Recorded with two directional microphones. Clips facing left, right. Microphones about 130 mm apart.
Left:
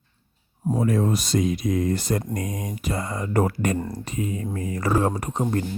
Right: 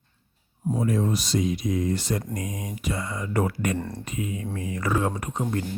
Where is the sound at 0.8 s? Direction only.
65° left (ahead or behind); by 3.8 s 40° left (ahead or behind).